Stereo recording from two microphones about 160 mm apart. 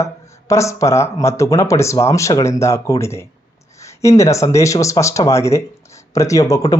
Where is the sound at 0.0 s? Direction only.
20° left (ahead or behind).